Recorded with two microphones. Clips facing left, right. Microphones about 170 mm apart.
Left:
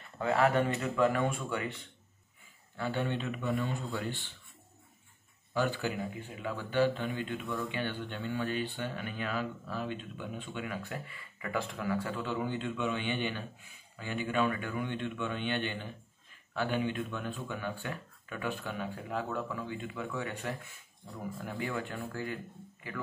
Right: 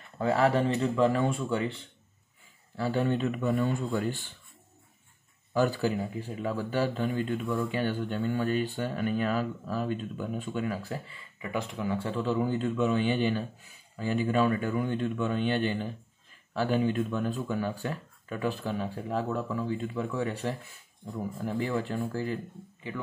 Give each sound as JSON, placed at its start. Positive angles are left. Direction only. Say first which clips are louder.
{"t": 0.2, "sound": "speech", "louder": "right 3 dB", "side_deg": -35}
{"t": 2.8, "sound": "a man's voice", "louder": "right 6 dB", "side_deg": -40}
{"t": 5.5, "sound": "speech", "louder": "right 6 dB", "side_deg": -40}